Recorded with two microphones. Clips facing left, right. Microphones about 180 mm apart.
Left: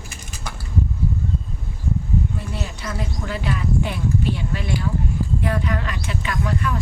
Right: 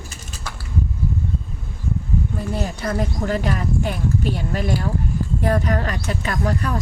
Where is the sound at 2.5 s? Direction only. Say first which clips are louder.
Right 6 dB; 50° right (ahead or behind).